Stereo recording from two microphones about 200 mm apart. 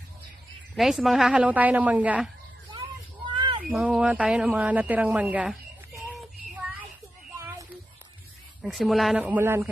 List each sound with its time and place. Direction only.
0.7 s a woman's voice: centre (ahead or behind)
3.3 s cat: 25° right (ahead or behind)
3.6 s speech: 5° right (ahead or behind)
7.3 s a sound: 15° right (ahead or behind)
8.6 s speech: centre (ahead or behind)